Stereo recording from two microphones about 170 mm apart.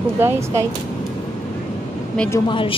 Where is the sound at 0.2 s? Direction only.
15° right (ahead or behind).